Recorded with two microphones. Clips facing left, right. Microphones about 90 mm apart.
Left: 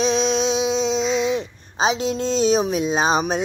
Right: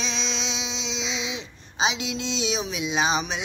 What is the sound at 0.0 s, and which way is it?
Speech, 50° left (ahead or behind).